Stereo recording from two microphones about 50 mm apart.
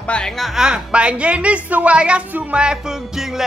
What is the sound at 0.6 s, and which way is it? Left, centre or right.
A woman's voice, centre.